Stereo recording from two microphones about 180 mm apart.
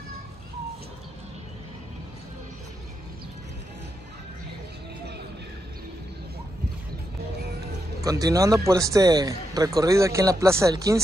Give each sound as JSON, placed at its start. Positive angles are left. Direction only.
{"t": 8.0, "sound": "a man's voice", "side_deg": -20}